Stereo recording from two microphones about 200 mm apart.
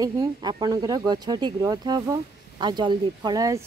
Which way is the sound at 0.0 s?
20° right (ahead or behind).